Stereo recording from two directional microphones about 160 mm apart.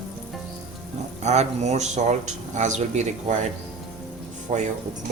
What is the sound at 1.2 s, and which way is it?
Speech, 45° right (ahead or behind).